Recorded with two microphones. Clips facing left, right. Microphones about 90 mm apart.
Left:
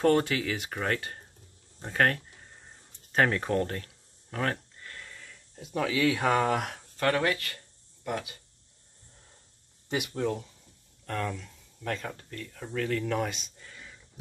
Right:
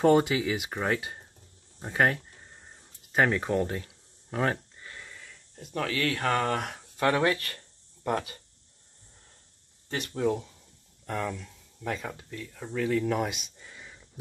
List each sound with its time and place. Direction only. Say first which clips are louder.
0.0 s speech: right 2 dB; 15° right (ahead or behind); by 6.8 s 5° left (ahead or behind)
7.0 s speech: right 2 dB; 20° right (ahead or behind)
8.1 s speech: right 4 dB; 40° right (ahead or behind)
9.8 s speech: left 3 dB; 10° left (ahead or behind)
10.1 s speech: right 3 dB; 10° right (ahead or behind)